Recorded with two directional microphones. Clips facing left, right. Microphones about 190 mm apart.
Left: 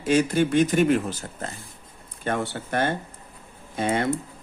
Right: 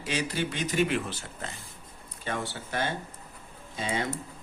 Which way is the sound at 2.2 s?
55° left (ahead or behind).